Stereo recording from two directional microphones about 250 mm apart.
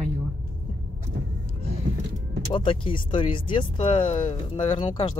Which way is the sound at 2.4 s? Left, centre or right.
Left.